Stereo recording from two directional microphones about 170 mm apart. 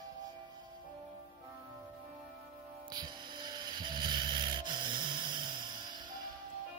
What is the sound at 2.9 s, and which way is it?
Mechanisms, 25° right (ahead or behind).